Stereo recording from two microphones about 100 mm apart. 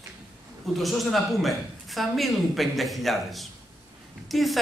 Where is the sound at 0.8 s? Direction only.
Centre (ahead or behind).